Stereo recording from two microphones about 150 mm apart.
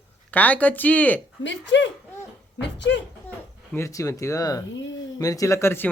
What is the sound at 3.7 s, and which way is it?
Speech, 20° left (ahead or behind).